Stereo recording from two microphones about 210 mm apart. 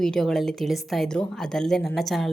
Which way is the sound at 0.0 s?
Centre (ahead or behind).